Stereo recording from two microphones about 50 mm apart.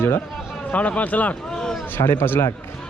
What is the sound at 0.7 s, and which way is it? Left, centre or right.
Speech, left.